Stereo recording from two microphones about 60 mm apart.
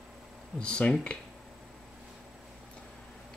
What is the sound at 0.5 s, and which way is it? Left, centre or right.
Speech, centre.